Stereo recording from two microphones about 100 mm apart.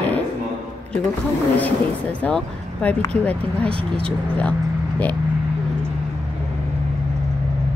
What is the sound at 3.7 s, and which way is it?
Speech, 65° right (ahead or behind).